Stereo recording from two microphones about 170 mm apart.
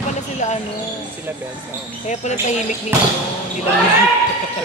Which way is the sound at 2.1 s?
45° left (ahead or behind).